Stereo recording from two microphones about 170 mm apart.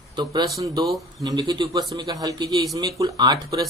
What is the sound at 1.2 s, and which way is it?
Speech, 25° right (ahead or behind).